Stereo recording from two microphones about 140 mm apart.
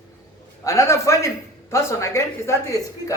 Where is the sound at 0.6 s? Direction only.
20° left (ahead or behind).